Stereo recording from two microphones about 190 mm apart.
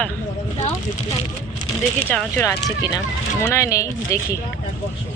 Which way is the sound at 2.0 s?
10° left (ahead or behind).